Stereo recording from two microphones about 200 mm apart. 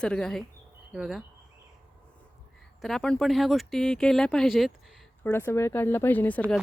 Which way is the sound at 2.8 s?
Centre (ahead or behind).